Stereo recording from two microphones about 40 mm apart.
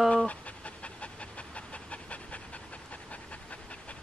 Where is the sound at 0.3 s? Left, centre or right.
Left.